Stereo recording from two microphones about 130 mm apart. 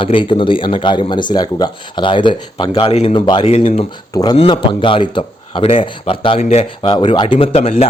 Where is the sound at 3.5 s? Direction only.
55° left (ahead or behind).